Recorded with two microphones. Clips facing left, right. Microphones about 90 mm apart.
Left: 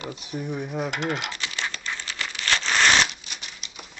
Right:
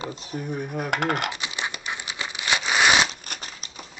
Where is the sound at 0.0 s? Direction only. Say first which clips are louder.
Right 1 dB; 35° right (ahead or behind).